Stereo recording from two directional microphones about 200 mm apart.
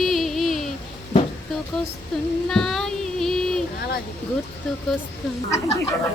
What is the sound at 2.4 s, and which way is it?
Child singing, centre (ahead or behind).